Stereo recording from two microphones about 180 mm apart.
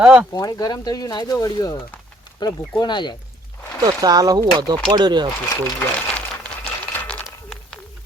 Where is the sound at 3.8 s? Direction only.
20° right (ahead or behind).